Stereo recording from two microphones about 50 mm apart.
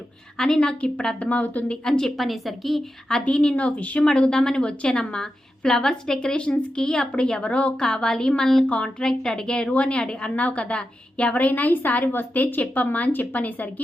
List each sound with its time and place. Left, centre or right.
0.3 s a woman's voice: centre
1.9 s a woman's voice: centre
3.1 s a woman's voice: centre
9.0 s a woman's voice: centre; by 13.8 s left